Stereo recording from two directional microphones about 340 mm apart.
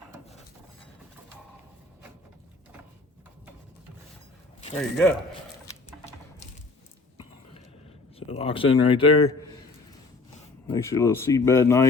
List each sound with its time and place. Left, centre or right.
4.7 s speech: centre
8.3 s speech: centre
10.7 s speech: centre